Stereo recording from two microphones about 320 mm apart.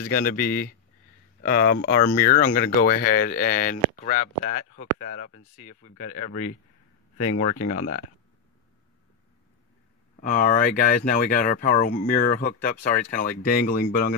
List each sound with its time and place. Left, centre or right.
0.0 s speech: left
10.2 s speech: left